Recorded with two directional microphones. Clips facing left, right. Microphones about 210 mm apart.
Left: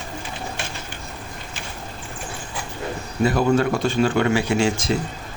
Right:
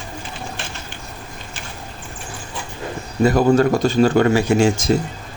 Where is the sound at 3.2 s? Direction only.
40° right (ahead or behind).